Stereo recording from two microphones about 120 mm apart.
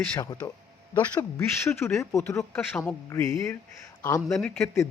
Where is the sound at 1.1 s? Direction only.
20° left (ahead or behind).